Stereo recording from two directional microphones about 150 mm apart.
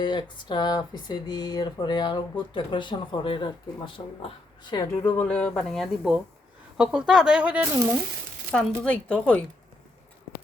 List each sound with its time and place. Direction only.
0.0 s speech: 30° left (ahead or behind)
5.0 s speech: 10° left (ahead or behind); by 7.7 s 10° right (ahead or behind)
8.5 s speech: 5° left (ahead or behind)